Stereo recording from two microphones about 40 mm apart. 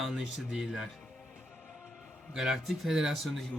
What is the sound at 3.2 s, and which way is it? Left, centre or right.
Speech, centre.